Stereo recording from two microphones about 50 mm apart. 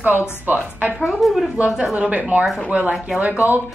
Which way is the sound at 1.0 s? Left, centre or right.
Centre.